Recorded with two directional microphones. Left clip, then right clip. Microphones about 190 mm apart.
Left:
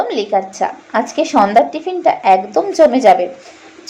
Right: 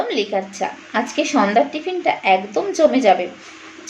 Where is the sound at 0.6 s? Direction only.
5° right (ahead or behind).